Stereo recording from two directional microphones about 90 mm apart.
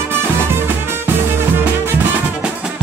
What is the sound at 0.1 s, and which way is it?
Music, 25° right (ahead or behind).